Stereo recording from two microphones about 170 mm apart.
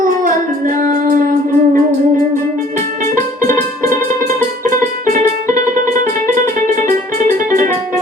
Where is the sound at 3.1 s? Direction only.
50° right (ahead or behind).